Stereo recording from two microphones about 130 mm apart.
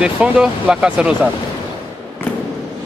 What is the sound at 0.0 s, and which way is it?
Speech, 10° right (ahead or behind).